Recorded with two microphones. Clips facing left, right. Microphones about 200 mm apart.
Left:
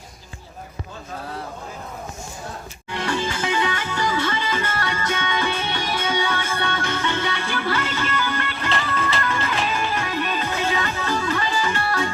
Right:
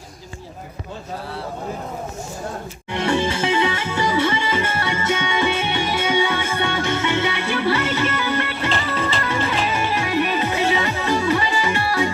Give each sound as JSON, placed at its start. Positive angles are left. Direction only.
{"t": 2.9, "sound": "music", "side_deg": -25}